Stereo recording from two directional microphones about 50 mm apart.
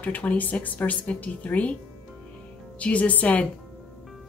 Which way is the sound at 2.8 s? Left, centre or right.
Left.